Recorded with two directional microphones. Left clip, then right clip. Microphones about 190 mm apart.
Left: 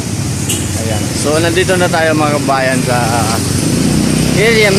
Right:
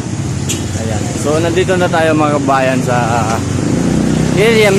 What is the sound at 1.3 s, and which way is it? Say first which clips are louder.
Speech: left 1 dB; 5° right (ahead or behind).